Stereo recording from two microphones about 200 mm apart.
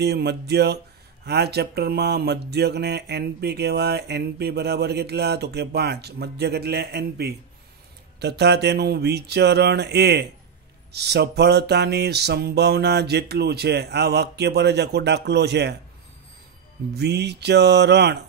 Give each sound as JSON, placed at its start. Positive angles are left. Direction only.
{"t": 0.0, "sound": "mantra", "side_deg": -55}
{"t": 16.9, "sound": "mantra", "side_deg": -55}